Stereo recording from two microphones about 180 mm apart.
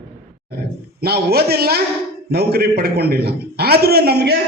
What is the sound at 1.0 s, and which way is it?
A man's voice, 60° right (ahead or behind).